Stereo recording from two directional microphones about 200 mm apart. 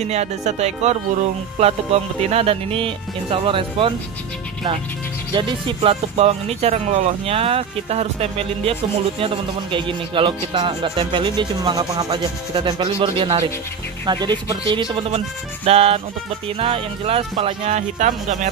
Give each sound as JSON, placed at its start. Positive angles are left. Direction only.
{"t": 0.0, "sound": "speech", "side_deg": -35}
{"t": 5.3, "sound": "speech", "side_deg": -25}